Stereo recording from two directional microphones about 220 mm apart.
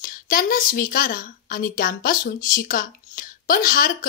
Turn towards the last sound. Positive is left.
turn(degrees=40)  # may be behind; listen again after turning